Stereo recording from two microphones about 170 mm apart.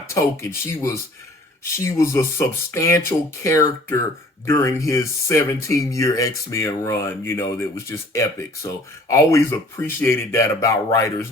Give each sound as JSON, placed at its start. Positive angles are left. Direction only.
{"t": 0.1, "sound": "speech", "side_deg": 15}